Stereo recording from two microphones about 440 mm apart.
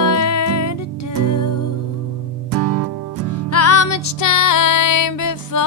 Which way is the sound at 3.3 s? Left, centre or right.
Left.